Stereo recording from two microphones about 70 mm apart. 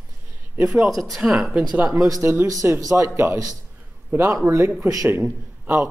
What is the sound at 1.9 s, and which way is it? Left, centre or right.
Speech, right.